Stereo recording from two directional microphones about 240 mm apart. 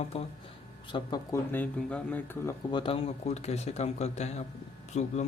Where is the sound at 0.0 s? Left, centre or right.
Left.